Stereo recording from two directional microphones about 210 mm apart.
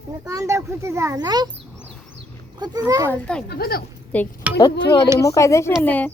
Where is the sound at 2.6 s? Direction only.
20° right (ahead or behind).